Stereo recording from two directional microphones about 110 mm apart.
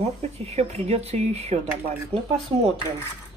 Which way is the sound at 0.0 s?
75° right (ahead or behind).